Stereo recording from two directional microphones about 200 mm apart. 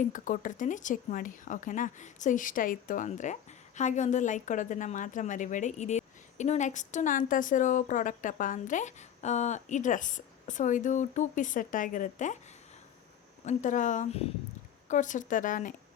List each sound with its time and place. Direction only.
0.0 s a woman's voice: 40° left (ahead or behind)
13.4 s a woman's voice: 35° left (ahead or behind)